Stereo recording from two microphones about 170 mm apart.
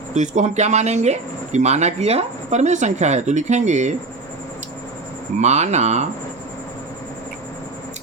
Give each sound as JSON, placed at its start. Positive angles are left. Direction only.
{"t": 0.1, "sound": "speech", "side_deg": -45}
{"t": 5.4, "sound": "speech", "side_deg": -40}